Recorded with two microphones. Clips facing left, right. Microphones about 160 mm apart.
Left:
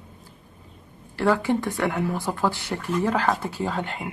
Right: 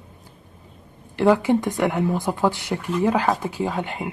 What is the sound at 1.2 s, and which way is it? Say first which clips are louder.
Speech: right 4 dB; 20° right (ahead or behind).